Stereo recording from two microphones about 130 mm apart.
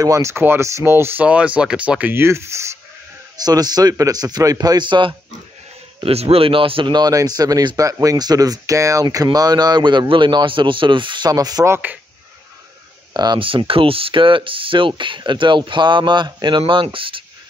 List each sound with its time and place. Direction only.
0.0 s speech: 25° right (ahead or behind)
6.0 s speech: 45° right (ahead or behind); by 11.7 s 30° right (ahead or behind)
11.7 s speech: 15° right (ahead or behind)
13.1 s speech: 35° right (ahead or behind)